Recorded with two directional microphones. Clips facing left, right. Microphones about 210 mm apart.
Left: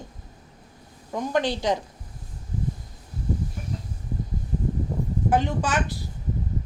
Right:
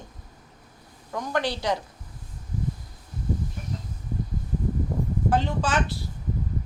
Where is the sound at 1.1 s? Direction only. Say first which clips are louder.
Left 3 dB; 20° left (ahead or behind).